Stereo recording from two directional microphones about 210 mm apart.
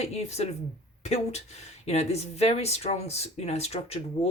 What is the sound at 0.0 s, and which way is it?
Speech, 30° left (ahead or behind).